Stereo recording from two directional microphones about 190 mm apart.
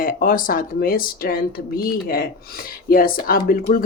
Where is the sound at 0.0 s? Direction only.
50° left (ahead or behind).